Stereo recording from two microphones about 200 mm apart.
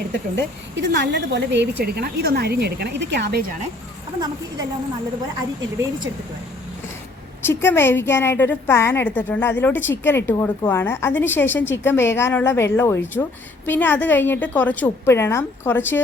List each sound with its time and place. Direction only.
0.8 s a woman's voice: 60° right (ahead or behind)
7.4 s a woman's voice: 10° left (ahead or behind)